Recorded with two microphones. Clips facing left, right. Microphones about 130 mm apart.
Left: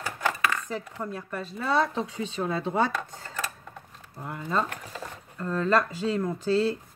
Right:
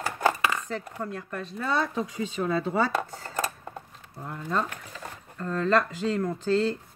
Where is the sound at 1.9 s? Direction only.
25° left (ahead or behind).